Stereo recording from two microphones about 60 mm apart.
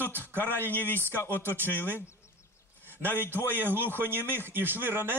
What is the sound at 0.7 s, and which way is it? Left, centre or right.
Speech, left.